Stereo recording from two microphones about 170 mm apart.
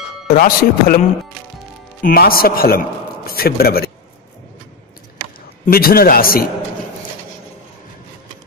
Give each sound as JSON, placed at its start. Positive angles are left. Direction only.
{"t": 0.3, "sound": "a man's voice", "side_deg": 60}
{"t": 5.7, "sound": "speech", "side_deg": 60}